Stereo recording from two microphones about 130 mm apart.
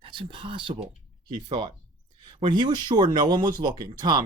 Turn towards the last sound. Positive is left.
turn(degrees=-35)  # may be behind; listen again after turning